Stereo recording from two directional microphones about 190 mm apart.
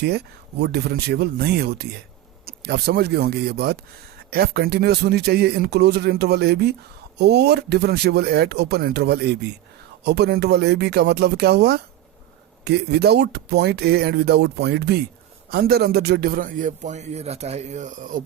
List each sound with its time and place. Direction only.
0.6 s a man's voice: 60° right (ahead or behind); by 18.2 s 45° right (ahead or behind)